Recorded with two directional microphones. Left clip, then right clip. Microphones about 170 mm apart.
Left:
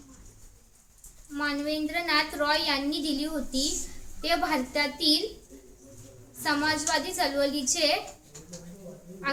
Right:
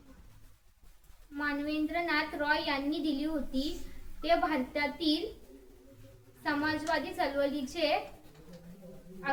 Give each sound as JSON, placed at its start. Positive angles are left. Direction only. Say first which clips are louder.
{"t": 1.4, "sound": "a woman's voice", "louder": "left 4 dB", "side_deg": 15}
{"t": 6.4, "sound": "a woman's voice", "louder": "left 5 dB", "side_deg": 15}